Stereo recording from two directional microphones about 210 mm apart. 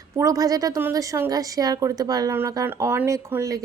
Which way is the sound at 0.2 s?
15° right (ahead or behind).